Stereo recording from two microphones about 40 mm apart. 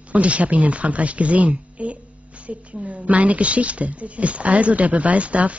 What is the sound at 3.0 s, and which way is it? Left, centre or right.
Speech, right.